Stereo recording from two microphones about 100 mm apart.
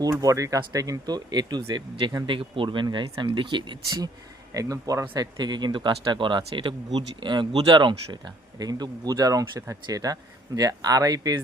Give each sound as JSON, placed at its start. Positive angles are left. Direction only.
{"t": 0.0, "sound": "speech", "side_deg": -40}
{"t": 4.5, "sound": "speech", "side_deg": -35}
{"t": 5.1, "sound": "speech", "side_deg": -45}